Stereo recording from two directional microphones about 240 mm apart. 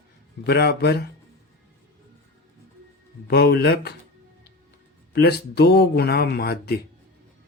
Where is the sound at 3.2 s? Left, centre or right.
Left.